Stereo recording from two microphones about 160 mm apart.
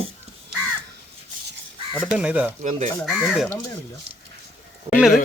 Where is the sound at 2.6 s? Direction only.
50° right (ahead or behind).